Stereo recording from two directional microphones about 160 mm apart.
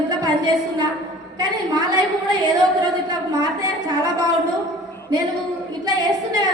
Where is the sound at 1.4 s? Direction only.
25° right (ahead or behind).